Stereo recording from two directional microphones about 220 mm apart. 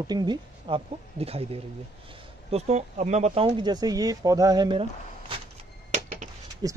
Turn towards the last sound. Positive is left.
turn(degrees=-20)  # may be behind; listen again after turning